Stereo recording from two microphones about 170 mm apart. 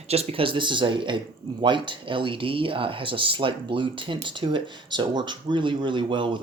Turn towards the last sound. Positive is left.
turn(degrees=-30)  # may be behind; listen again after turning